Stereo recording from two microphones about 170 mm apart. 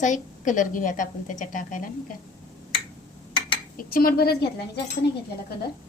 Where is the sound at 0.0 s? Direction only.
45° left (ahead or behind).